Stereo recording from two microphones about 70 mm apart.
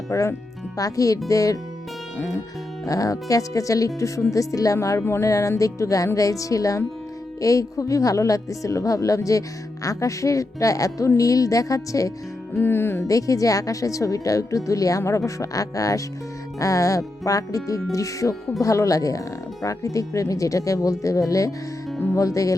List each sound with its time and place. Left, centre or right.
0.1 s speech: left
2.8 s speech: left
5.3 s speech: left
12.5 s speech: left
13.1 s speech: left